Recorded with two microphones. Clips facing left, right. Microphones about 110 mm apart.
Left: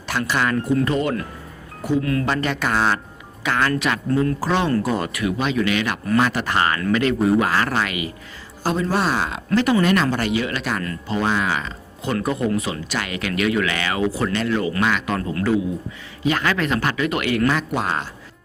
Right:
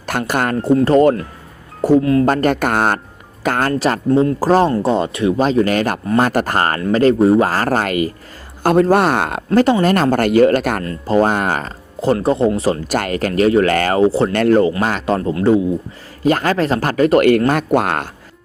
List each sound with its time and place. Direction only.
0.0 s speech: 50° right (ahead or behind)
0.5 s speech: 30° right (ahead or behind)
2.0 s speech: 30° right (ahead or behind)
2.2 s speech: 50° right (ahead or behind); by 4.4 s 30° right (ahead or behind)
4.4 s speech: 40° right (ahead or behind)
4.7 s speech: 25° right (ahead or behind); by 8.1 s 45° right (ahead or behind)
8.6 s speech: 60° right (ahead or behind)
11.9 s speech: 30° right (ahead or behind); by 14.0 s 45° right (ahead or behind)
14.0 s speech: 30° right (ahead or behind)
14.3 s speech: 55° right (ahead or behind)
14.8 s speech: 40° right (ahead or behind)
16.2 s speech: 40° right (ahead or behind)